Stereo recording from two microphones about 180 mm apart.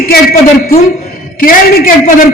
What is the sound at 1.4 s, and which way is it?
Speech, 50° left (ahead or behind).